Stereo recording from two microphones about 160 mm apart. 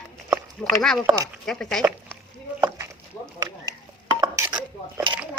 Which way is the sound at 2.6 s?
20° right (ahead or behind).